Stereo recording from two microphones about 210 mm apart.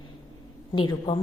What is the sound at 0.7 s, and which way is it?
Speech, 20° left (ahead or behind).